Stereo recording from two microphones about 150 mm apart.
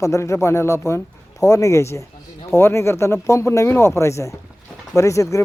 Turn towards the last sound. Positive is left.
turn(degrees=20)  # may be behind; listen again after turning